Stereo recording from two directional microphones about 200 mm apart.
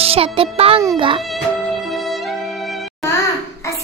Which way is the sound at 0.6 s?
30° right (ahead or behind).